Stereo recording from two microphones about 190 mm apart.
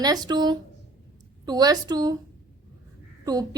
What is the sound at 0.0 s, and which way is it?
A woman's voice, 20° right (ahead or behind).